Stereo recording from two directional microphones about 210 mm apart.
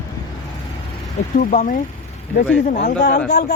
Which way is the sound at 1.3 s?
40° left (ahead or behind).